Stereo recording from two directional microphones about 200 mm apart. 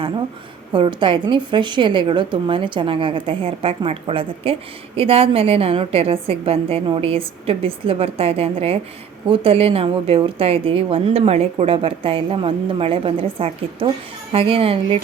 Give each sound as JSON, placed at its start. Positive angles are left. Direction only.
{"t": 0.7, "sound": "a woman's voice", "side_deg": -25}